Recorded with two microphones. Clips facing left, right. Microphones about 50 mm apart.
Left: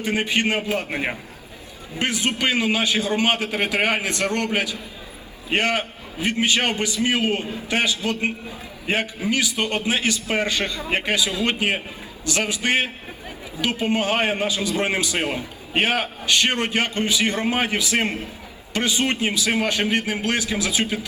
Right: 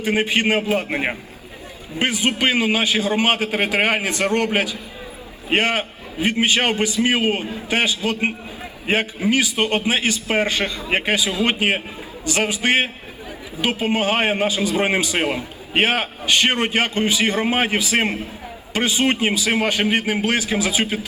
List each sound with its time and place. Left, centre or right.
0.0 s a man's voice: right